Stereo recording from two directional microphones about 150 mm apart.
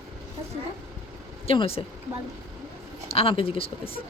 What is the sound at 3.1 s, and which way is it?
Speech, 35° left (ahead or behind).